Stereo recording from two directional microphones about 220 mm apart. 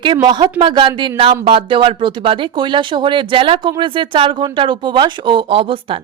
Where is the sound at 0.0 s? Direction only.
20° right (ahead or behind).